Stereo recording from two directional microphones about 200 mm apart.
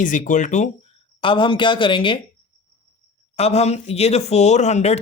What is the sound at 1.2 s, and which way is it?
Speech, 25° left (ahead or behind).